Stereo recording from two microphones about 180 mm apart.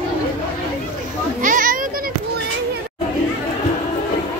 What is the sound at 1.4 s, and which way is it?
Children playing, 50° right (ahead or behind).